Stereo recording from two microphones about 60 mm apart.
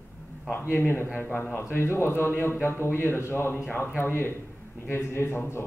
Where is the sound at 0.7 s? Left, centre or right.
Left.